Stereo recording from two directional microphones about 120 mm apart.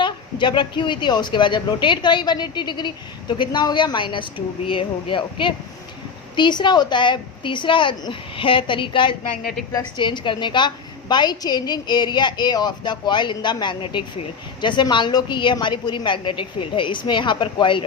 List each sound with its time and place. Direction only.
0.0 s a woman's voice: 40° left (ahead or behind)